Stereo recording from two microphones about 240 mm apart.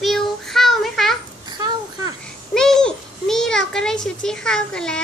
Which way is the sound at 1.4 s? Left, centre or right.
Centre.